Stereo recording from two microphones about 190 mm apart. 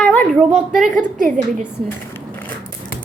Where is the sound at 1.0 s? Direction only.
40° right (ahead or behind).